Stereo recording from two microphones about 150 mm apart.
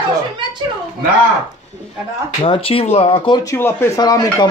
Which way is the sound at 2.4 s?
35° left (ahead or behind).